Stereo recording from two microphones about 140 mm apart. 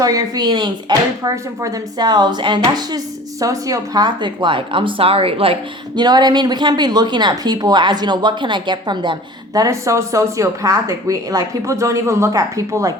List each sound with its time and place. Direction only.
0.0 s speech: 25° right (ahead or behind); by 5.5 s 40° right (ahead or behind)
6.0 s speech: 30° right (ahead or behind)